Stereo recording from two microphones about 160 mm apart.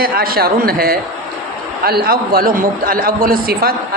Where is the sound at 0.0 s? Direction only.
70° right (ahead or behind).